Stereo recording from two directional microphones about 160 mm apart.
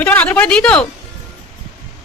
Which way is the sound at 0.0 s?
10° left (ahead or behind).